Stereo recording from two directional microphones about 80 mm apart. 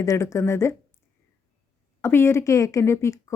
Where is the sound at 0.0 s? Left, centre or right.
Left.